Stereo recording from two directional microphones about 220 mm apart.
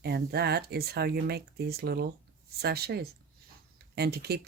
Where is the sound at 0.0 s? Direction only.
45° right (ahead or behind).